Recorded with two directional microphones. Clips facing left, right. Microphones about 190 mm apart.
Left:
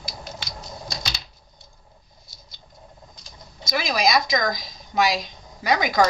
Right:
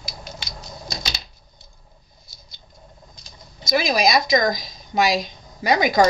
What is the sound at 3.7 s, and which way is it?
Speech, 20° right (ahead or behind).